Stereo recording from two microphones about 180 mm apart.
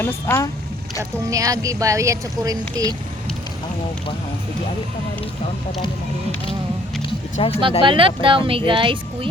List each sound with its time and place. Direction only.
0.0 s speech: 15° left (ahead or behind)
1.3 s speech: 20° right (ahead or behind)
7.4 s speech: 30° left (ahead or behind)
7.8 s speech: 30° right (ahead or behind)